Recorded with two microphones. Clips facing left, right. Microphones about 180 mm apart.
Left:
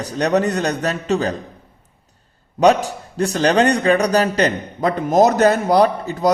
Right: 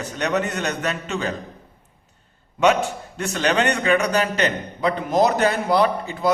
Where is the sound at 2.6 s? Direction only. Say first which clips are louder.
Left 4 dB; 35° left (ahead or behind).